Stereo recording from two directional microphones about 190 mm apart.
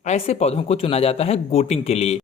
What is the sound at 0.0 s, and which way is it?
A man's voice, 35° left (ahead or behind).